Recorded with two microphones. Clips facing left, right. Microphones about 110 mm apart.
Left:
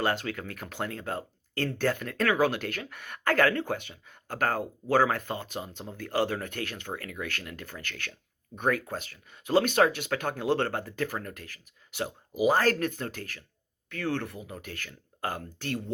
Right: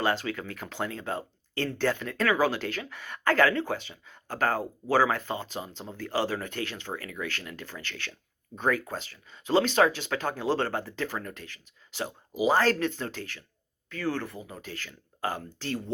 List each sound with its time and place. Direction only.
0.1 s speech: 50° left (ahead or behind)
13.9 s speech: 60° left (ahead or behind)